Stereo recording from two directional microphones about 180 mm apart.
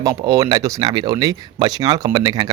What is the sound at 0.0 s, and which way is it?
Speech, 20° right (ahead or behind).